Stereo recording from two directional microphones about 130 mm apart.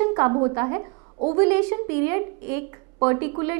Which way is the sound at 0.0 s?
25° right (ahead or behind).